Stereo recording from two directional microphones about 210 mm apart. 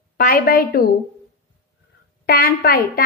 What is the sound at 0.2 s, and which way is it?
Speech, 45° left (ahead or behind).